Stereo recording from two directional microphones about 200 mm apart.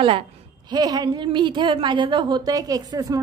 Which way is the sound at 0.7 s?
20° right (ahead or behind).